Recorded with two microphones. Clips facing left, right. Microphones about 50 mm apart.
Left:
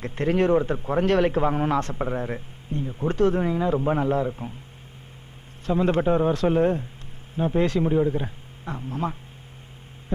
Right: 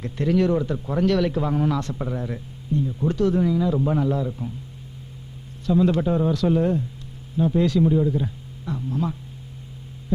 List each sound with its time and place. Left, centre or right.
0.0 s a man's voice: left
5.6 s a man's voice: left